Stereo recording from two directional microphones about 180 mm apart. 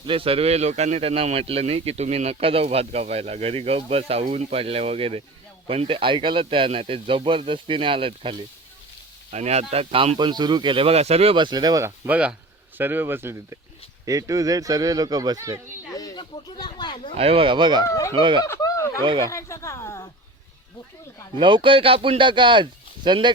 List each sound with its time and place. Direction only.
0.0 s a man's voice: 30° right (ahead or behind)
15.9 s speech: 20° left (ahead or behind)
17.2 s speech: 30° right (ahead or behind)
17.8 s speech: 15° left (ahead or behind)
18.1 s speech: 25° right (ahead or behind)
18.4 s snicker: 15° left (ahead or behind)
19.3 s speech: 15° left (ahead or behind)
21.3 s speech: 25° right (ahead or behind)